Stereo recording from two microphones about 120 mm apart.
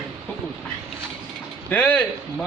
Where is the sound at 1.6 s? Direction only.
15° left (ahead or behind).